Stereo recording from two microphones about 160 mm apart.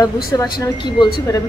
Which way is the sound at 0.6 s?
30° left (ahead or behind).